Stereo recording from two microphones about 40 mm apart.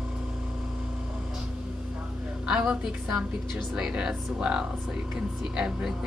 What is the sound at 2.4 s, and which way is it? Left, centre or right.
A woman's voice, centre.